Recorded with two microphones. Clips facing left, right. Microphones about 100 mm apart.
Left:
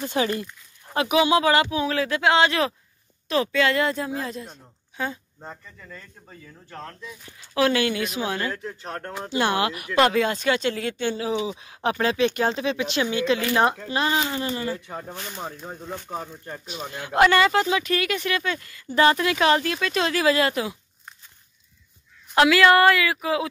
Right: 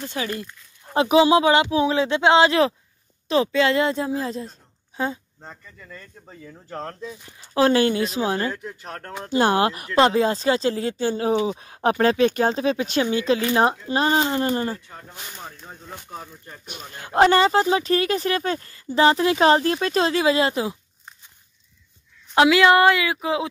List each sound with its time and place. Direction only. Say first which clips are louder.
0.3 s speech: left 2 dB; 5° left (ahead or behind)
0.9 s speech: right 4 dB; 30° right (ahead or behind)
5.4 s speech: left 2 dB; 10° left (ahead or behind)
6.7 s speech: right 6 dB; 35° right (ahead or behind)
8.5 s speech: left 2 dB; centre (ahead or behind)
9.3 s speech: right 4 dB; 40° right (ahead or behind)
14.9 s speech: left 7 dB; 45° left (ahead or behind)
15.6 s speech: left 5 dB; 20° left (ahead or behind)
16.9 s speech: right 2 dB; 40° right (ahead or behind)
22.3 s speech: right 1 dB; 20° right (ahead or behind)